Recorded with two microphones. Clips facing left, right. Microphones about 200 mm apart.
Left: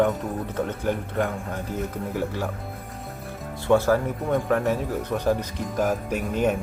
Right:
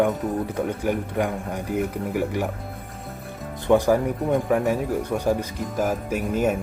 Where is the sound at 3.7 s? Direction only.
15° right (ahead or behind).